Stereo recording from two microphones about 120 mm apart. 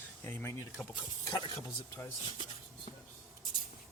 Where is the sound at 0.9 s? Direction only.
35° left (ahead or behind).